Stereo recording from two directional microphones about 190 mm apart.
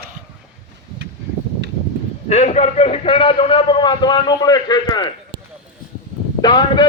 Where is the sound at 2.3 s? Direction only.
35° left (ahead or behind).